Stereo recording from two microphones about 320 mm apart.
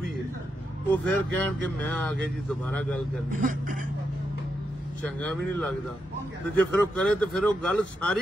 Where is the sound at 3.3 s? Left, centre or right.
Right.